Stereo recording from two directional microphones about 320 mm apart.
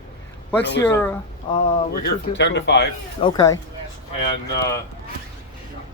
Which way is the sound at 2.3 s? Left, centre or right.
Left.